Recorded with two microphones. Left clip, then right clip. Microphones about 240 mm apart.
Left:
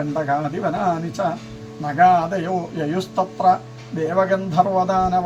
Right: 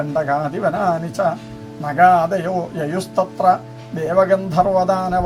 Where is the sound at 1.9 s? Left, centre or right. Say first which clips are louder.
Right 2 dB; right.